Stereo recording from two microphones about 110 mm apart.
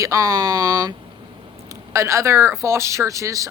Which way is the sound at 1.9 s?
25° right (ahead or behind).